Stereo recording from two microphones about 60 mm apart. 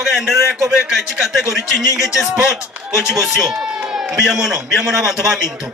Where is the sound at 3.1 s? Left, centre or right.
Centre.